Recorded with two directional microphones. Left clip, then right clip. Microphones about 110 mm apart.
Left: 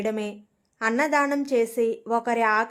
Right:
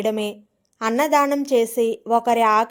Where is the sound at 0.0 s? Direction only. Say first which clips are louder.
Right 5 dB; 30° right (ahead or behind).